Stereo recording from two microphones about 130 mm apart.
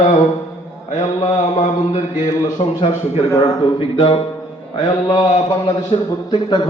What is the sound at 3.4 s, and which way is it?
Speech, 50° left (ahead or behind).